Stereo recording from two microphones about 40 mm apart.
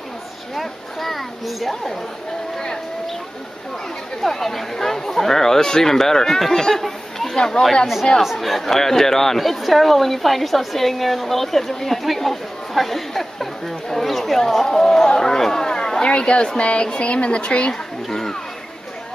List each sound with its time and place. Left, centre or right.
0.6 s speech: centre
4.2 s speech: centre
7.3 s speech: centre
8.2 s speech: centre; by 17.7 s left
18.0 s speech: centre